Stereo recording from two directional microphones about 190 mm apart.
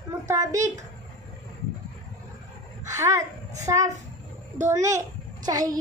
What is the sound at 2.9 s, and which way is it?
A child's voice, 15° right (ahead or behind).